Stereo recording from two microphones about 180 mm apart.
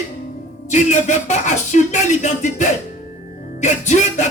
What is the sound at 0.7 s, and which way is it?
Speech, 40° left (ahead or behind).